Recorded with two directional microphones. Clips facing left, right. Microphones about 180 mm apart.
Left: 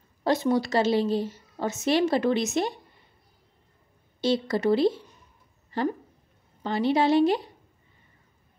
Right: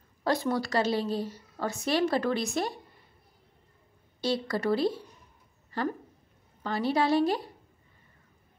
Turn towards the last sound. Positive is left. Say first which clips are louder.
# left 4 dB
turn(degrees=25)  # may be behind; listen again after turning